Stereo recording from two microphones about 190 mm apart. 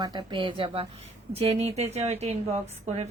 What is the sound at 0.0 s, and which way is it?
A woman's voice, 20° right (ahead or behind).